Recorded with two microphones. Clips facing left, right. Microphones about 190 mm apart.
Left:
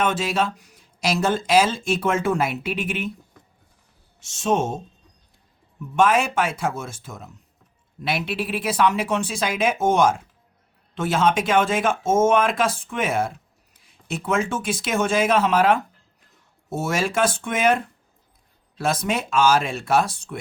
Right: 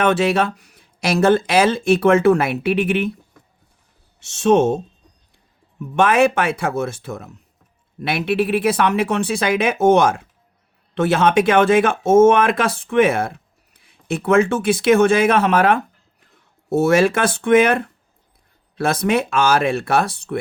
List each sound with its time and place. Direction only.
0.0 s speech: 65° right (ahead or behind)
4.2 s speech: 65° right (ahead or behind)
6.0 s speech: 65° right (ahead or behind)